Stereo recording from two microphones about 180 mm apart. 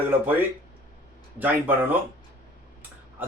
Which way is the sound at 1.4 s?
10° right (ahead or behind).